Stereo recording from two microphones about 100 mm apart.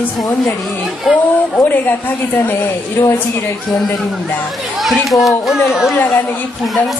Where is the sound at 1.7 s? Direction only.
20° left (ahead or behind).